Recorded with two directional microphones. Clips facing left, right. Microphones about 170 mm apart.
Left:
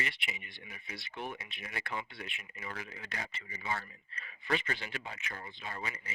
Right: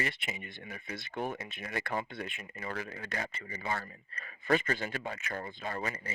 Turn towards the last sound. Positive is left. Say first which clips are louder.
# right 5 dB
turn(degrees=-45)  # may be behind; listen again after turning